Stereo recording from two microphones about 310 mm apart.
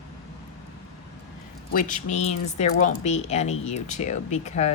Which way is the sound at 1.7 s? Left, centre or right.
Left.